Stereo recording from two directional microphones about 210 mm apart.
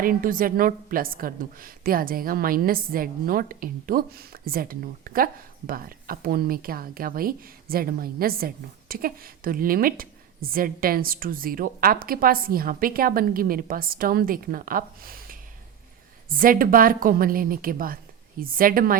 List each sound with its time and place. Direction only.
0.0 s a woman's voice: 40° right (ahead or behind)